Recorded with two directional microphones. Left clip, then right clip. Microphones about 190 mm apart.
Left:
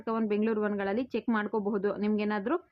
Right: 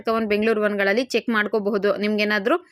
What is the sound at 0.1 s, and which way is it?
A woman's voice, 20° right (ahead or behind).